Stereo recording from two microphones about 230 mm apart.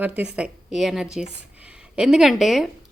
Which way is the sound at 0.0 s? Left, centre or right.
Centre.